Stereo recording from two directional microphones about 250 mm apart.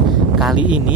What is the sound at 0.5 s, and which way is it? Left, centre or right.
Speech, centre.